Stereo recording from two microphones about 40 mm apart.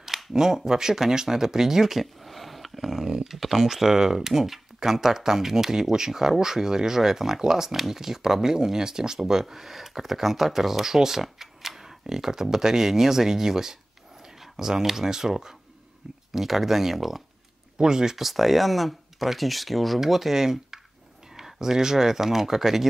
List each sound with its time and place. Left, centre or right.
0.0 s speech: centre
17.7 s speech: centre
18.1 s speech: centre